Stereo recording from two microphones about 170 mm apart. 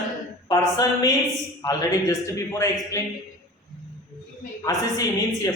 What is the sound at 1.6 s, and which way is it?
A woman's voice, 20° left (ahead or behind).